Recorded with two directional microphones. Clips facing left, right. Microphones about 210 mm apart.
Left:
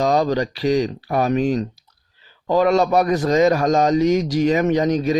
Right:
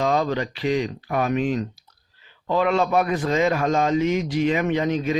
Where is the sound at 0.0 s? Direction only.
35° left (ahead or behind).